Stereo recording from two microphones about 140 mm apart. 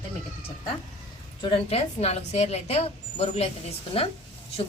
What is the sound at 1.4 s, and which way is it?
A woman's voice, 40° left (ahead or behind).